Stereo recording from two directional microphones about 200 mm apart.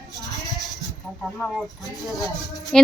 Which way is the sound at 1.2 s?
Centre (ahead or behind).